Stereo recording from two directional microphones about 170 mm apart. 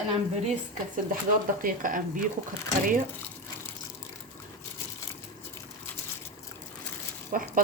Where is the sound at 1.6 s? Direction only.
50° right (ahead or behind).